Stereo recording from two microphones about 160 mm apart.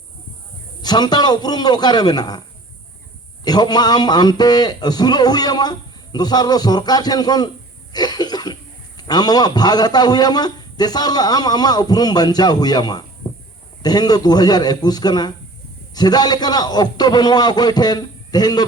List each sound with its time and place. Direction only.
0.8 s speech: 25° left (ahead or behind)
3.4 s speech: 25° left (ahead or behind)
7.9 s cough: 25° left (ahead or behind)
9.0 s speech: 25° left (ahead or behind)